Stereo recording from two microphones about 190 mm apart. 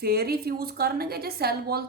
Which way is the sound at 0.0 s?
55° right (ahead or behind).